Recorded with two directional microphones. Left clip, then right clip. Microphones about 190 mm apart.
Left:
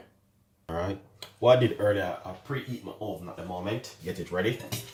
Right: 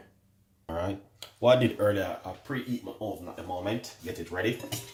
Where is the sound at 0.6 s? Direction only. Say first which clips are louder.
Left 1 dB; 15° right (ahead or behind).